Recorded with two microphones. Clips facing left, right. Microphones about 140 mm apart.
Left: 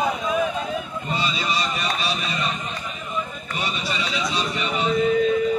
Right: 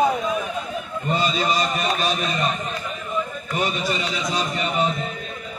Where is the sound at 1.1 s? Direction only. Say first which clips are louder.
Right 4 dB; 45° right (ahead or behind).